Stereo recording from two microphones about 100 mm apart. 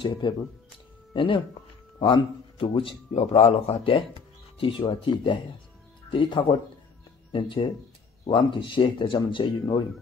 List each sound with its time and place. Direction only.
0.0 s a man's voice: 55° left (ahead or behind)